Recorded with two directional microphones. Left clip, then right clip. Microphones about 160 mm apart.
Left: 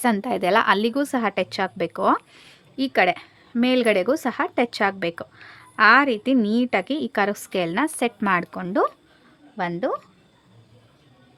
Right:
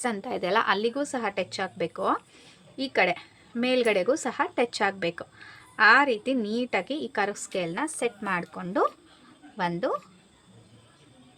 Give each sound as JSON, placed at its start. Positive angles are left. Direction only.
{"t": 0.0, "sound": "a woman's voice", "side_deg": 55}